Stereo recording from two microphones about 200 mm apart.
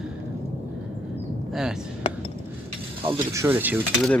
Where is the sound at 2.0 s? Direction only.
30° left (ahead or behind).